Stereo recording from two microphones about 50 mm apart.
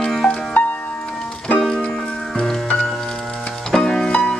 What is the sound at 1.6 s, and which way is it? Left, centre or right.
Music, centre.